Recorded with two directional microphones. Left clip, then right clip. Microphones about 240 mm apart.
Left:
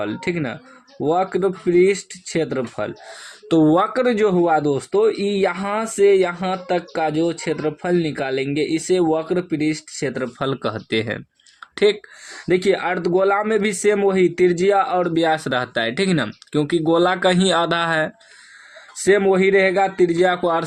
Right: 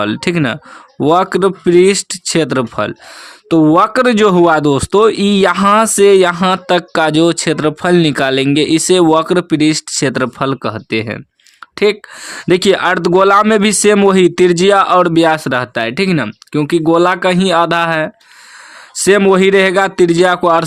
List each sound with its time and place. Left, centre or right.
0.0 s speech: right
3.5 s speech: right
3.9 s speech: right
19.0 s speech: right